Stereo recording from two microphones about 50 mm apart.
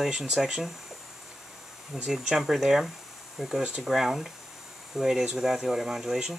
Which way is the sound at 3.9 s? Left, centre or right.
Centre.